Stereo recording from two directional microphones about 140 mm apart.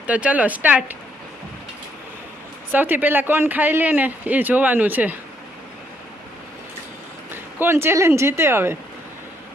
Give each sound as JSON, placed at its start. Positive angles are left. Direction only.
{"t": 0.1, "sound": "speech", "side_deg": -10}
{"t": 2.7, "sound": "speech", "side_deg": -15}
{"t": 7.6, "sound": "speech", "side_deg": -15}